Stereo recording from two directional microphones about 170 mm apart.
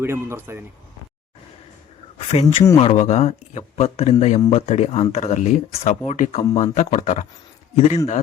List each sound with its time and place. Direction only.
0.0 s speech: 15° right (ahead or behind)
2.1 s a man's voice: 35° left (ahead or behind)